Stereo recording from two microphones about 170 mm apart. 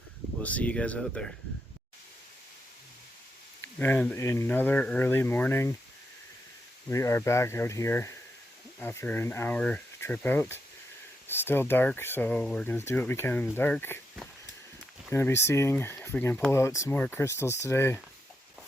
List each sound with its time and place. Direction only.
0.4 s speech: 10° left (ahead or behind)
3.6 s speech: 10° left (ahead or behind)
6.8 s speech: 15° left (ahead or behind)
15.1 s speech: 15° left (ahead or behind)